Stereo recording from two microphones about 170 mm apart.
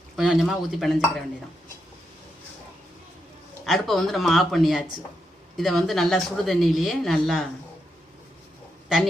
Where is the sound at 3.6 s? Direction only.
Centre (ahead or behind).